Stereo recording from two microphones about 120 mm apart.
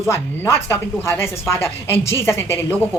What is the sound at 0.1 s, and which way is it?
Speech, 20° left (ahead or behind).